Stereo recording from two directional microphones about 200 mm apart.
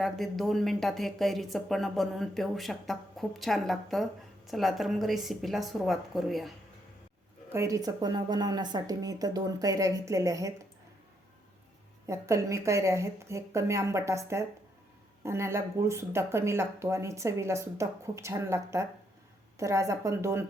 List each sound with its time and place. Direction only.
0.0 s speech: centre (ahead or behind)
7.5 s speech: 15° right (ahead or behind)
12.0 s speech: 15° right (ahead or behind)